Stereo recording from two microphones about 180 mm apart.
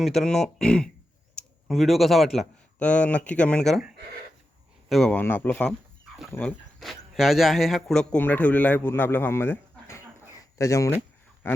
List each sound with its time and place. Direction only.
0.0 s a man's voice: centre (ahead or behind)
6.7 s a man's voice: centre (ahead or behind); by 10.9 s 15° left (ahead or behind)